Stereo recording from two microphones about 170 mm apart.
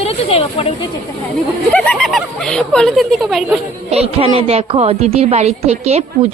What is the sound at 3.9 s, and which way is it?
A woman's voice, 35° right (ahead or behind).